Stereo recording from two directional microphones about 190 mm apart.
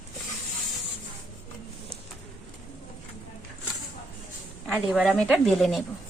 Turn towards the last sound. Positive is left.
turn(degrees=0)  # may be behind; listen again after turning